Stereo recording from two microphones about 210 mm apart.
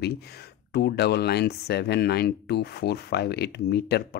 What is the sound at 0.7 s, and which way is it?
Speech, 50° left (ahead or behind).